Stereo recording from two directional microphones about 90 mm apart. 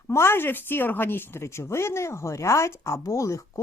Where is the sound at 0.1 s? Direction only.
30° left (ahead or behind).